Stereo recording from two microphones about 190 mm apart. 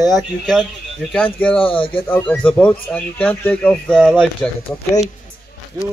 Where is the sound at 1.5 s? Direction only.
30° left (ahead or behind).